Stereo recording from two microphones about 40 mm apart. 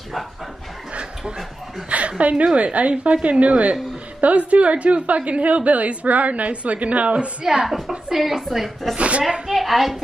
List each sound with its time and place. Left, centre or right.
1.9 s a woman's voice: right
7.6 s speech: centre
8.9 s a woman's voice: right
9.5 s speech: centre